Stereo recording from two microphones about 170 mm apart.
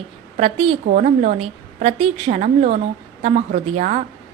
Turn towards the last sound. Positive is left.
turn(degrees=-50)  # may be behind; listen again after turning